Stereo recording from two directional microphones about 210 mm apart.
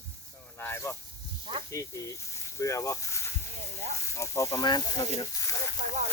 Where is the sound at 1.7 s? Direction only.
15° left (ahead or behind).